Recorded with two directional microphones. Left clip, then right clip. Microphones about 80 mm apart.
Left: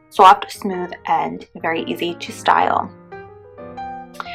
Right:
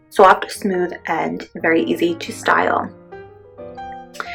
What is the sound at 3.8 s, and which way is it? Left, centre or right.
Music, right.